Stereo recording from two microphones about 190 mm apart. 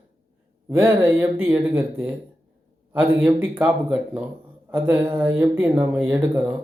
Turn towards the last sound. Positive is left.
turn(degrees=-10)  # may be behind; listen again after turning